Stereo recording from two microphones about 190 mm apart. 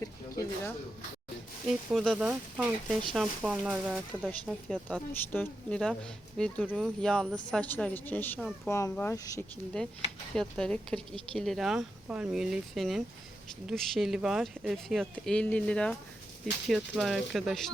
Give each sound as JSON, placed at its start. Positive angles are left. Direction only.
{"t": 0.0, "sound": "a sound", "side_deg": 20}
{"t": 1.6, "sound": "speech", "side_deg": 0}
{"t": 8.7, "sound": "speech", "side_deg": 15}
{"t": 10.3, "sound": "speech", "side_deg": 5}